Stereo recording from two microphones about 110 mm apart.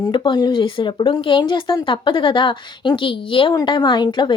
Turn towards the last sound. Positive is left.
turn(degrees=45)  # may be behind; listen again after turning